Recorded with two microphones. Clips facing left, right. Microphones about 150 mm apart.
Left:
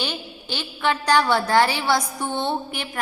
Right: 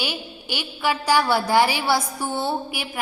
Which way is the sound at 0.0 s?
10° right (ahead or behind).